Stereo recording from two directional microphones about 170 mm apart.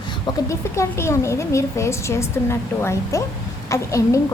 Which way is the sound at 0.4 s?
15° left (ahead or behind).